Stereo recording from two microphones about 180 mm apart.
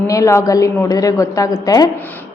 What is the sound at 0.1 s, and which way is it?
A woman's voice, 15° left (ahead or behind).